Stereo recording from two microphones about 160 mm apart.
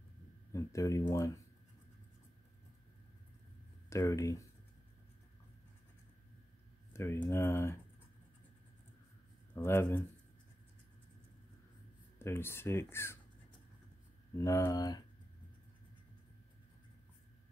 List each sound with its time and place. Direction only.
0.5 s speech: 20° left (ahead or behind)
3.9 s speech: 20° left (ahead or behind)
6.9 s speech: 15° left (ahead or behind)
9.5 s speech: 15° left (ahead or behind)
12.2 s speech: 15° left (ahead or behind)
14.4 s speech: 20° left (ahead or behind)